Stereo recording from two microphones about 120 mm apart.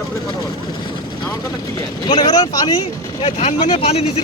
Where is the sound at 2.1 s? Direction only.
35° left (ahead or behind).